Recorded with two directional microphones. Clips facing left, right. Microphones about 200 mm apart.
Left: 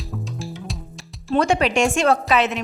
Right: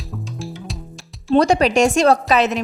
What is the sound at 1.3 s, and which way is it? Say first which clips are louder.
Speech: right 4 dB; 35° right (ahead or behind).